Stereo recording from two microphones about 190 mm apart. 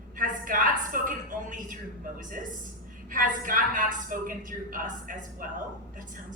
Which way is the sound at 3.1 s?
45° right (ahead or behind).